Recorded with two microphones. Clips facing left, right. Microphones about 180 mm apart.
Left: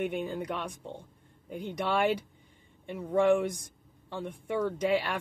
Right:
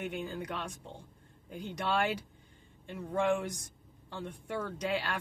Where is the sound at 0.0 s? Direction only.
65° left (ahead or behind).